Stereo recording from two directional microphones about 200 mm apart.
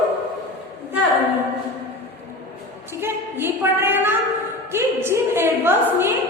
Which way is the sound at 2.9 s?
10° right (ahead or behind).